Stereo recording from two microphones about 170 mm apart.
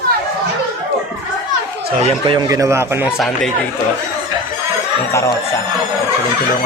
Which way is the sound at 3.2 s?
Centre (ahead or behind).